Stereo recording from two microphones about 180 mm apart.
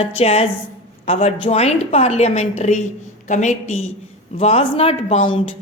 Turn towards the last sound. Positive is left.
turn(degrees=30)  # may be behind; listen again after turning